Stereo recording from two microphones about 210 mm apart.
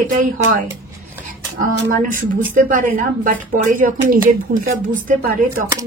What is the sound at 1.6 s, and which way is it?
A woman's voice, 40° right (ahead or behind).